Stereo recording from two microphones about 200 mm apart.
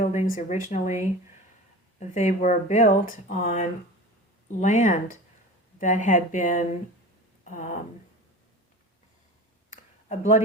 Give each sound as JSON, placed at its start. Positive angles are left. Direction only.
{"t": 0.0, "sound": "speech", "side_deg": 40}
{"t": 10.1, "sound": "speech", "side_deg": 40}